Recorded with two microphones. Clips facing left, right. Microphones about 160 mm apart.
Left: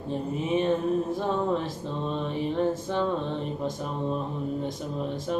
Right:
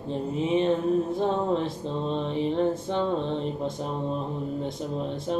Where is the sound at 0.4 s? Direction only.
30° right (ahead or behind).